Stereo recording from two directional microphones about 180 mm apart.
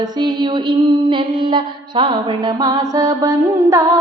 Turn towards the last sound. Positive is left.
turn(degrees=-15)  # may be behind; listen again after turning